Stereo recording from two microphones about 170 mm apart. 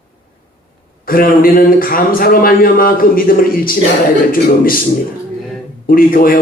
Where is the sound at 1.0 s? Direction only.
55° left (ahead or behind).